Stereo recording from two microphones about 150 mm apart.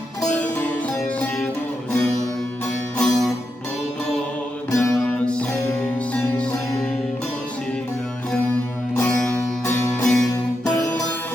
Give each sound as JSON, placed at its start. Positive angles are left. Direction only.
{"t": 3.0, "sound": "music", "side_deg": 0}
{"t": 4.7, "sound": "music", "side_deg": 20}
{"t": 5.0, "sound": "music", "side_deg": 5}
{"t": 10.0, "sound": "music", "side_deg": 5}